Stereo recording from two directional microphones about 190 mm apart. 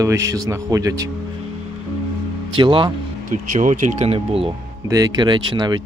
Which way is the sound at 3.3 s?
45° right (ahead or behind).